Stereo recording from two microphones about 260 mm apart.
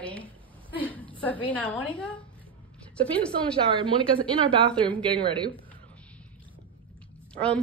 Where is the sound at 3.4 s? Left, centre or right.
Centre.